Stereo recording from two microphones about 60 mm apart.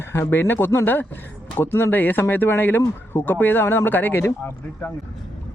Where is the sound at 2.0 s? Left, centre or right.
Left.